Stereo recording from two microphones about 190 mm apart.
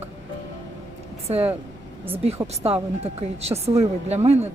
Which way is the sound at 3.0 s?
35° right (ahead or behind).